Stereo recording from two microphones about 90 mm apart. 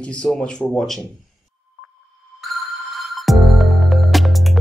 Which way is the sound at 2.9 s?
Centre (ahead or behind).